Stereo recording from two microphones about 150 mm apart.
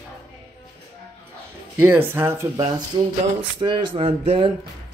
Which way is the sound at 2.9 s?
30° right (ahead or behind).